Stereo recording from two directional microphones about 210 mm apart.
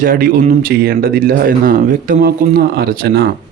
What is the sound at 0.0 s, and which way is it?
A man's voice, 40° right (ahead or behind).